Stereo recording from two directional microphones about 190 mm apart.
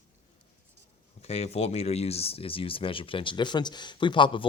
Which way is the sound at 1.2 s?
30° left (ahead or behind).